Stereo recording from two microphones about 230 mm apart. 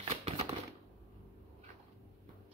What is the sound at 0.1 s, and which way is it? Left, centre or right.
Typewriter, right.